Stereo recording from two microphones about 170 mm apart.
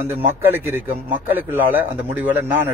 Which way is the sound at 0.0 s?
10° right (ahead or behind).